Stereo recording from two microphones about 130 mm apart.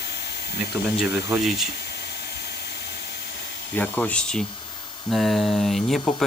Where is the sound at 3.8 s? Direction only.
10° left (ahead or behind).